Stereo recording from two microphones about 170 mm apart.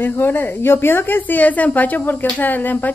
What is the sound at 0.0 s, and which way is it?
A woman's voice, 15° left (ahead or behind).